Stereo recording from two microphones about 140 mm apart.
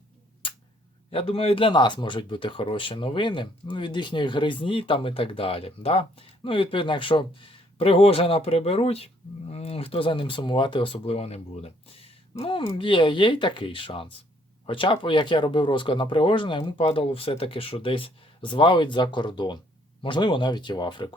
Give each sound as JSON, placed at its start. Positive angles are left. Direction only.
{"t": 1.1, "sound": "speech", "side_deg": 45}